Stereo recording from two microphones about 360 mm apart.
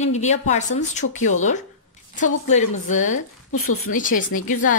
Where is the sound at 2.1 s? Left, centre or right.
Centre.